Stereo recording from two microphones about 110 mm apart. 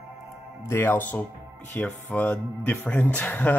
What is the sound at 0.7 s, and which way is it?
Speech, 20° left (ahead or behind).